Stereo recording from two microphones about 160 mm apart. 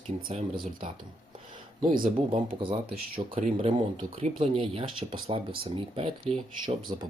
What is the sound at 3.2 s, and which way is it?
Speech, 35° right (ahead or behind).